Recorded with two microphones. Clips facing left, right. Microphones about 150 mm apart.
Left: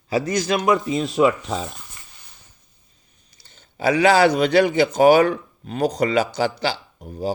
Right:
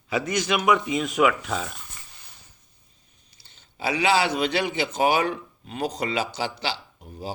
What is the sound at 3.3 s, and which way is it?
Speech, 45° left (ahead or behind).